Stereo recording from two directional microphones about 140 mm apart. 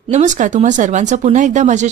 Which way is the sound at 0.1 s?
60° right (ahead or behind).